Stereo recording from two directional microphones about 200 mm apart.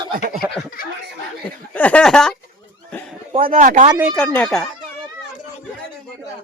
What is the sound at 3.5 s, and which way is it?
Speech, 40° right (ahead or behind).